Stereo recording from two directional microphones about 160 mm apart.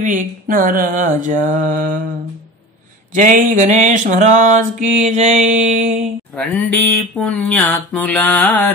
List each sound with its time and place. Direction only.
0.0 s mantra: 55° right (ahead or behind)
3.1 s mantra: 55° right (ahead or behind)
6.3 s speech: 10° left (ahead or behind)